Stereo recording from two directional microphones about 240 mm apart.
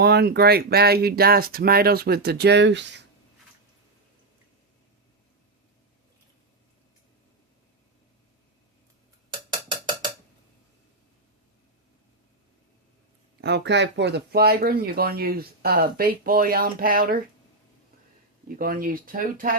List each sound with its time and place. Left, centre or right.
0.0 s speech: right
9.5 s percussion: centre
13.4 s speech: right
18.4 s speech: right